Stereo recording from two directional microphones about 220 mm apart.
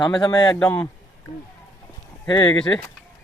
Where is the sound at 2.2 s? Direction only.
20° left (ahead or behind).